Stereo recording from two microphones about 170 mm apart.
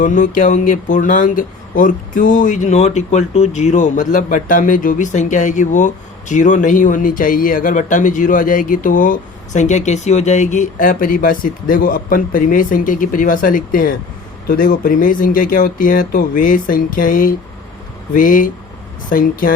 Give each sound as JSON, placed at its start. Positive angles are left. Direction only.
{"t": 0.0, "sound": "speech", "side_deg": 50}